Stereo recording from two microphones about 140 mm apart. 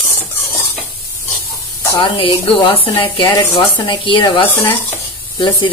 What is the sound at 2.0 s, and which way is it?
Speech, 40° left (ahead or behind).